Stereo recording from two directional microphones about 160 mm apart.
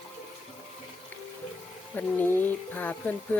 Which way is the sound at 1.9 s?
10° left (ahead or behind).